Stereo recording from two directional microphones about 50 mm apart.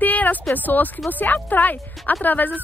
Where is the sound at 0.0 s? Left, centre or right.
Left.